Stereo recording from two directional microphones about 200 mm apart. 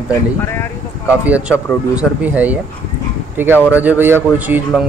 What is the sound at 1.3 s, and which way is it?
Speech, 5° right (ahead or behind).